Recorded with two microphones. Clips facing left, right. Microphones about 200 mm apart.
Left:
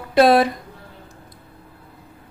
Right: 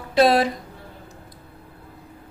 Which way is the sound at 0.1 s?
55° left (ahead or behind).